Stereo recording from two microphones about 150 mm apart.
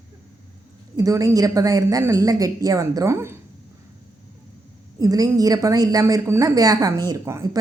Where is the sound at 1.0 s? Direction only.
20° right (ahead or behind).